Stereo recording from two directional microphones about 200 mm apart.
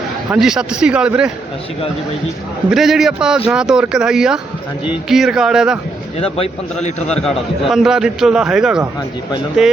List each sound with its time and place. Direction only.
0.3 s a man's voice: 5° right (ahead or behind)
2.6 s a man's voice: centre (ahead or behind)
6.1 s a man's voice: 30° left (ahead or behind)
7.2 s a man's voice: centre (ahead or behind)